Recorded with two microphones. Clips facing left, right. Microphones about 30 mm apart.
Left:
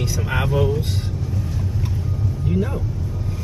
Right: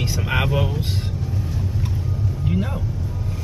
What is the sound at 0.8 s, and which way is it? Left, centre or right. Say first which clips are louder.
Speech: even; right.